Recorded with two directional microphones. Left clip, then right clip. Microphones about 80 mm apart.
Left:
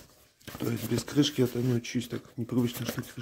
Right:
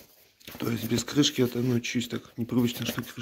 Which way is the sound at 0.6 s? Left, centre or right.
Left.